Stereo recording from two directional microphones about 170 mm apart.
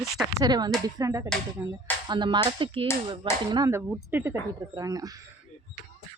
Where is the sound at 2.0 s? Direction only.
25° right (ahead or behind).